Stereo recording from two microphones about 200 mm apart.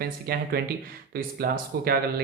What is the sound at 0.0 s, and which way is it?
Speech, 50° right (ahead or behind).